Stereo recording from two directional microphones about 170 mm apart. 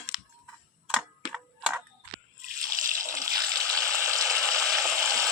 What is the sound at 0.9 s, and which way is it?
Computer keyboard, centre (ahead or behind).